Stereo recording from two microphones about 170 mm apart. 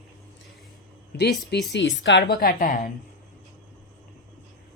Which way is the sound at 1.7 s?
90° left.